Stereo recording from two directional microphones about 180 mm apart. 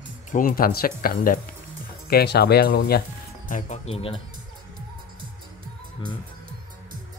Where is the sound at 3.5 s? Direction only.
35° left (ahead or behind).